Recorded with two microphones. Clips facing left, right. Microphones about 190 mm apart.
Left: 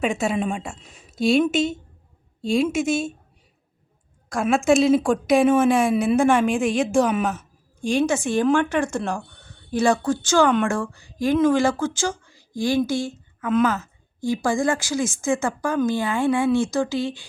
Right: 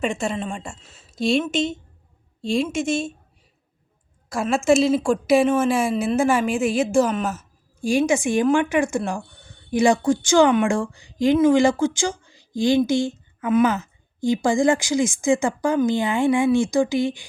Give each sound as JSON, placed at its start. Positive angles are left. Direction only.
{"t": 0.0, "sound": "a woman's voice", "side_deg": 0}
{"t": 0.8, "sound": "speech", "side_deg": 15}
{"t": 1.1, "sound": "a woman's voice", "side_deg": 0}
{"t": 4.3, "sound": "a woman's voice", "side_deg": 0}